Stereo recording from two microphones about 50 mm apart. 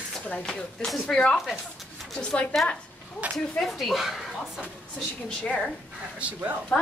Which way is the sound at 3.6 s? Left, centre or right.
Centre.